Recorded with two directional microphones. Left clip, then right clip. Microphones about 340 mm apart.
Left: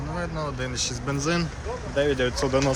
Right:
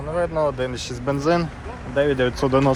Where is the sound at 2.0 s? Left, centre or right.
Centre.